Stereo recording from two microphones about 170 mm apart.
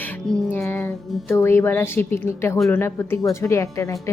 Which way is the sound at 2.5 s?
Centre (ahead or behind).